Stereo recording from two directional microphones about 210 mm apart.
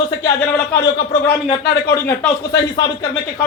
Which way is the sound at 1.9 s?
10° left (ahead or behind).